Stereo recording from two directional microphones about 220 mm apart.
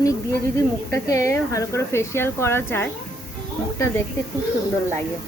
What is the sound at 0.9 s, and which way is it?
A woman's voice, 15° left (ahead or behind).